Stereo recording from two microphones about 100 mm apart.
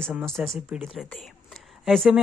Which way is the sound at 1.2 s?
Centre (ahead or behind).